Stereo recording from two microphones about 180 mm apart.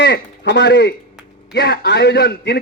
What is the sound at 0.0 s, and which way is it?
A man's voice, 75° left (ahead or behind).